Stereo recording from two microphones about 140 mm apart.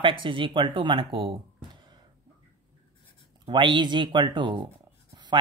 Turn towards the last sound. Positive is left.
turn(degrees=-30)  # may be behind; listen again after turning